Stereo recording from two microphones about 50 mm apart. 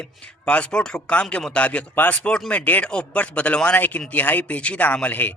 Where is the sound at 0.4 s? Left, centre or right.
Left.